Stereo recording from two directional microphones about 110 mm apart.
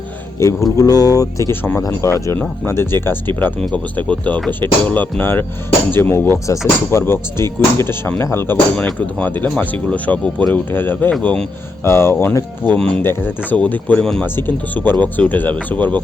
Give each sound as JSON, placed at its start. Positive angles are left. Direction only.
{"t": 0.8, "sound": "speech", "side_deg": 35}
{"t": 12.6, "sound": "speech", "side_deg": 10}